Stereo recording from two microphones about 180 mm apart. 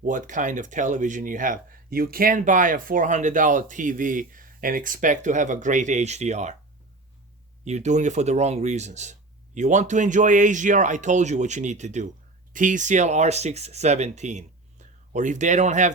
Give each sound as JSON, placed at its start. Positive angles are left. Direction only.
{"t": 0.0, "sound": "speech", "side_deg": -45}
{"t": 7.6, "sound": "speech", "side_deg": -40}